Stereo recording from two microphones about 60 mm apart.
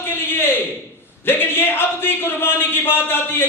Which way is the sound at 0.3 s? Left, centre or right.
Left.